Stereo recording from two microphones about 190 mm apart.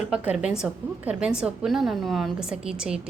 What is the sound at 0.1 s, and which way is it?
A woman's voice, 5° right (ahead or behind).